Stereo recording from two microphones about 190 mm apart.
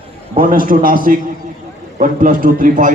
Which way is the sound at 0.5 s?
50° right (ahead or behind).